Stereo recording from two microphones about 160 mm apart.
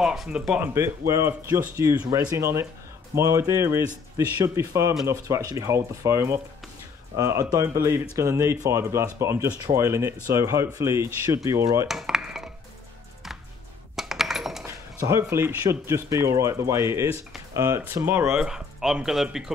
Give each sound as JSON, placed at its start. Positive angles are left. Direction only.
{"t": 0.0, "sound": "speech", "side_deg": -5}
{"t": 0.6, "sound": "speech", "side_deg": -15}
{"t": 11.9, "sound": "dishes", "side_deg": 0}
{"t": 13.9, "sound": "coin", "side_deg": 0}
{"t": 15.0, "sound": "speech", "side_deg": -15}